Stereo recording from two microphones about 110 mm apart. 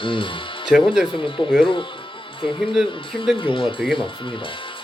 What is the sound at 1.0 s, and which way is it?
Speech, 50° left (ahead or behind).